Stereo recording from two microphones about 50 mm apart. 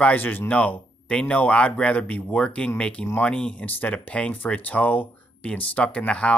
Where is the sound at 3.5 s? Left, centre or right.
Left.